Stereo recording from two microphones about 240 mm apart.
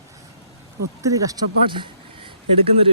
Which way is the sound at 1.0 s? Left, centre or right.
Centre.